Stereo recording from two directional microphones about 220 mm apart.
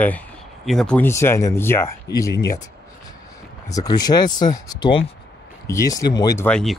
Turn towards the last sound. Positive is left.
turn(degrees=5)  # may be behind; listen again after turning